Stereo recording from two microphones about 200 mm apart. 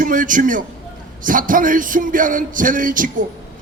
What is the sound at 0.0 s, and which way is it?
A man's voice, 40° right (ahead or behind).